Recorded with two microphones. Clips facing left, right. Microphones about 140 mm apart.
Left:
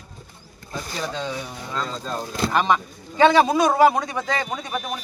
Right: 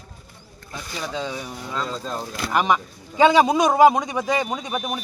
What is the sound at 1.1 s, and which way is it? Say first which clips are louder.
A man's voice: even; 10° right (ahead or behind).